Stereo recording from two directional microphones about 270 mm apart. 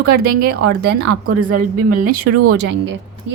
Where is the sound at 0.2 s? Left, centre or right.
Right.